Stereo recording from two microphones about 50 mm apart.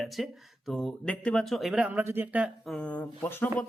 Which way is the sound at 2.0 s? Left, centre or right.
Right.